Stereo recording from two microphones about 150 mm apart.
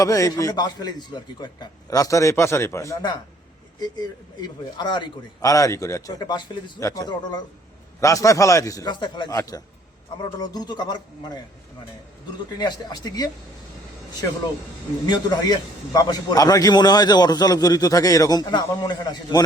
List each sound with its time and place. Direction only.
0.0 s a man's voice: 25° left (ahead or behind)
12.5 s a man's voice: 30° left (ahead or behind)
15.0 s a man's voice: 25° left (ahead or behind)